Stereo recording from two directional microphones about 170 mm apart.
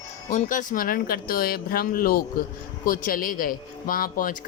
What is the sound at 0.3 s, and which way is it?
A man's voice, 50° left (ahead or behind).